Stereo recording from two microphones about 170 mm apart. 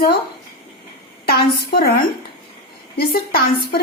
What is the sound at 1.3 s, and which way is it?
Speech, 65° left (ahead or behind).